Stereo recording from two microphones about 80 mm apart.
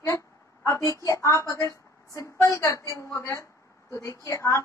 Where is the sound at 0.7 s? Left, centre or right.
Left.